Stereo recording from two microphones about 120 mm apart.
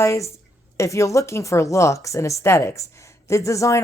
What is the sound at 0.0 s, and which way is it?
Speech, 25° left (ahead or behind).